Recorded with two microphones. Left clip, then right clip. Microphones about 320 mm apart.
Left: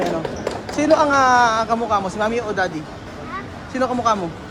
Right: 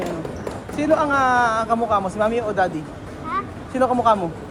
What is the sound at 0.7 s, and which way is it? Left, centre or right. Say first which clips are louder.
Speech: left 3 dB; centre.